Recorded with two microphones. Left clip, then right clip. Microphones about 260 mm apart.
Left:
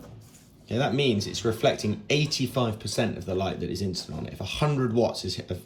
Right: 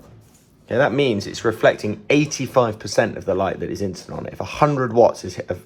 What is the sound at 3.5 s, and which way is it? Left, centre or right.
Speech, centre.